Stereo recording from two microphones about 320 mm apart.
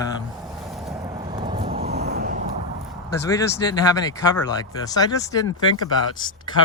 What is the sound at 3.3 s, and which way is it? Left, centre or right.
Speech, centre.